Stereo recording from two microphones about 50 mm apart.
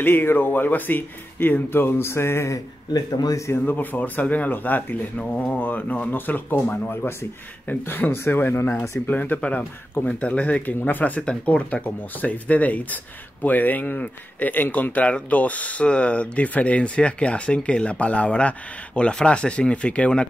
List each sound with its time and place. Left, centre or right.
0.0 s speech: left
3.6 s speech: left
7.6 s speech: left
9.0 s speech: left
9.4 s speech: left
10.6 s speech: left